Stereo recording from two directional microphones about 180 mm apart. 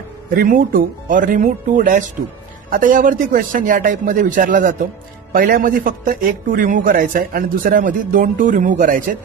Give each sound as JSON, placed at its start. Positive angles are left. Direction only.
{"t": 0.4, "sound": "a man's voice", "side_deg": -50}